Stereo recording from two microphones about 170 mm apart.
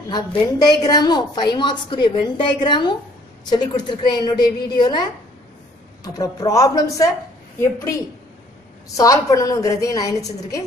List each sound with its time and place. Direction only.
0.1 s a woman's voice: 25° left (ahead or behind)
6.0 s a woman's voice: 20° left (ahead or behind)
8.9 s a woman's voice: 20° left (ahead or behind)